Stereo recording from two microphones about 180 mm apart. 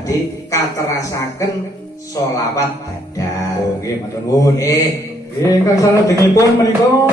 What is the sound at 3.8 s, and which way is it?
A man's voice, 20° left (ahead or behind).